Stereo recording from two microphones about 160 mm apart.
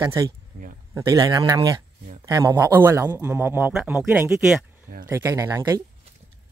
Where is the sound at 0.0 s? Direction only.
20° right (ahead or behind); by 4.6 s 5° right (ahead or behind).